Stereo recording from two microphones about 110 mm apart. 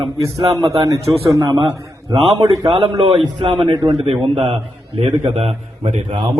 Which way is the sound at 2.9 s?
50° right (ahead or behind).